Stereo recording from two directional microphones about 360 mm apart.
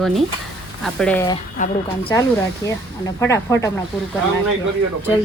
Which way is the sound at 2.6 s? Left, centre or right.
Centre.